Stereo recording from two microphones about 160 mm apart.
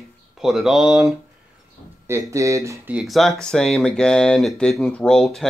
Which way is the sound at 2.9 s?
5° right (ahead or behind).